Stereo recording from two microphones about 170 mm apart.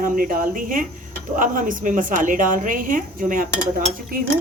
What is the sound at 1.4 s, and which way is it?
A woman's voice, 50° right (ahead or behind).